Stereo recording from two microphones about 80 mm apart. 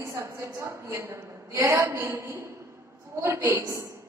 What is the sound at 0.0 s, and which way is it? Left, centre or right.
A woman's voice, right.